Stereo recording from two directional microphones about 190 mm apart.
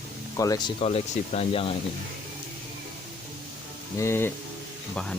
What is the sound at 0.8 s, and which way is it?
Speech, 30° left (ahead or behind).